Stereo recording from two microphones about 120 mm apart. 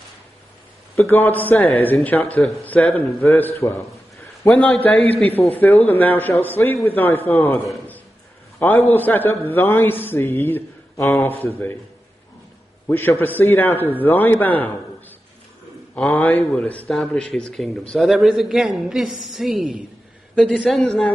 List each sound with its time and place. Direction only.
0.9 s a man's voice: 20° left (ahead or behind)
12.8 s a man's voice: 20° left (ahead or behind)
15.9 s a man's voice: 15° left (ahead or behind)